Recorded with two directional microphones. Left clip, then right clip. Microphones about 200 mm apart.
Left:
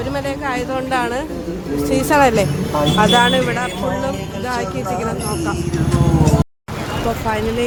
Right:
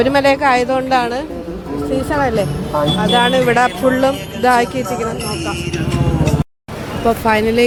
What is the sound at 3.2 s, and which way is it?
Speech, 20° right (ahead or behind).